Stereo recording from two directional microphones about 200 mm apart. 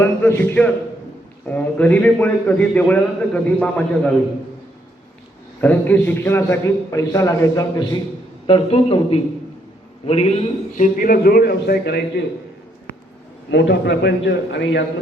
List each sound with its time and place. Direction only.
0.0 s a man's voice: 10° left (ahead or behind)
5.5 s a man's voice: 10° left (ahead or behind); by 12.2 s 55° left (ahead or behind)
13.5 s a man's voice: 60° left (ahead or behind)